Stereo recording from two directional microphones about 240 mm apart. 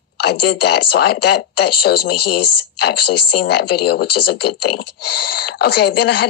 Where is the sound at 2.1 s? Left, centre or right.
Left.